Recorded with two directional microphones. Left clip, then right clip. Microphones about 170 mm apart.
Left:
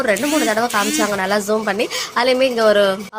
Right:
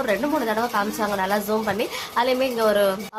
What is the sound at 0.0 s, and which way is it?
Speech, 20° left (ahead or behind).